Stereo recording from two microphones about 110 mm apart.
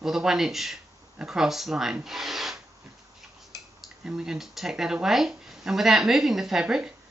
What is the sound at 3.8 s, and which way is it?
Speech, 5° right (ahead or behind).